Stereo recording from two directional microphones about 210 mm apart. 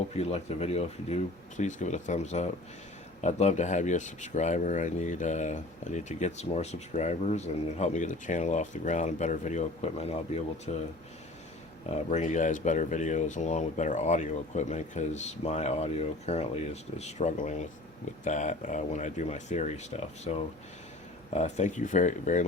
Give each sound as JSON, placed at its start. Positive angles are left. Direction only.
{"t": 0.1, "sound": "speech", "side_deg": 30}
{"t": 11.9, "sound": "speech", "side_deg": 35}